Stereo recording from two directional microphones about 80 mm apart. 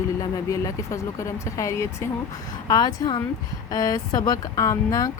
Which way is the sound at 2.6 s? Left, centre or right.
Left.